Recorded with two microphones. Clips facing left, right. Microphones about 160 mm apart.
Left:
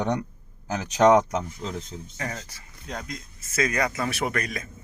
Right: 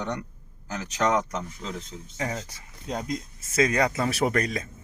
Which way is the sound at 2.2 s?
15° right (ahead or behind).